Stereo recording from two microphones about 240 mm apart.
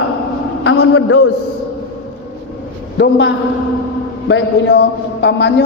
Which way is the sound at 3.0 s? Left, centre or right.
Left.